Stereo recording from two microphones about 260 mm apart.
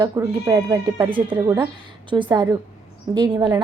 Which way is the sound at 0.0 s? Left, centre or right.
Centre.